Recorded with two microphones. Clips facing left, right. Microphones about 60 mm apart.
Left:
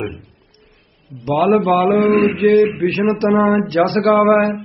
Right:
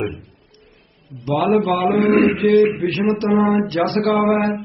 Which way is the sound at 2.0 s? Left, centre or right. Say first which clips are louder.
Left 1 dB; right.